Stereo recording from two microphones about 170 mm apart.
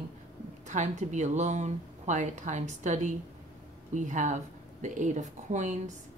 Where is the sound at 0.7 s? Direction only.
45° right (ahead or behind).